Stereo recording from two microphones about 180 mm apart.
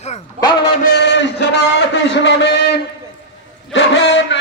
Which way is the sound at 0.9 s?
70° left (ahead or behind).